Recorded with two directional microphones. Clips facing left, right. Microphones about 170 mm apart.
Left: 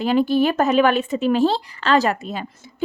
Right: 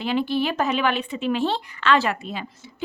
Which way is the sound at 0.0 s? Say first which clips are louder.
Left 6 dB; 45° left (ahead or behind).